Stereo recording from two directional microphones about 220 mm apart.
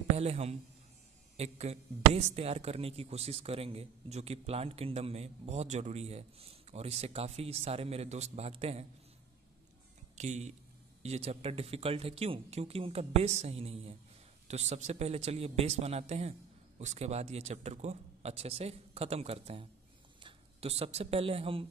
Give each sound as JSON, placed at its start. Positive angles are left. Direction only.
{"t": 0.2, "sound": "speech", "side_deg": -30}
{"t": 10.1, "sound": "speech", "side_deg": -30}